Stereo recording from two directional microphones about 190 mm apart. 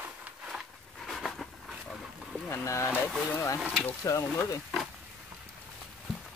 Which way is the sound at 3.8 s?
15° left (ahead or behind).